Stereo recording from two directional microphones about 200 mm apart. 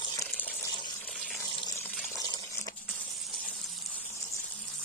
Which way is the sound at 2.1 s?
20° left (ahead or behind).